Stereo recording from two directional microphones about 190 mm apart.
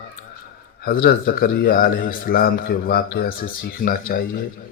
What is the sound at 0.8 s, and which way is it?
A man's voice, 50° left (ahead or behind).